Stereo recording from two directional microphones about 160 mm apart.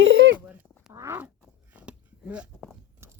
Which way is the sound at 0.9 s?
15° right (ahead or behind).